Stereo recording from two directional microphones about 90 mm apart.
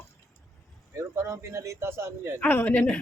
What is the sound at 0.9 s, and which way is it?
Speech, 35° right (ahead or behind).